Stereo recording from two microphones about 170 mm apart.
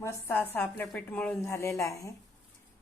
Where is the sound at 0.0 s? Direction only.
15° left (ahead or behind).